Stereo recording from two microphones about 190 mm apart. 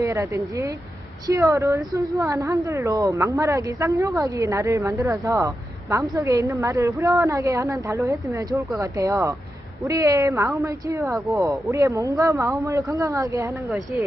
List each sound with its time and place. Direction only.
0.0 s a woman's voice: 15° right (ahead or behind)